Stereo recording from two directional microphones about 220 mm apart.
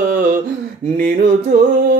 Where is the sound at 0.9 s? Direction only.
40° right (ahead or behind).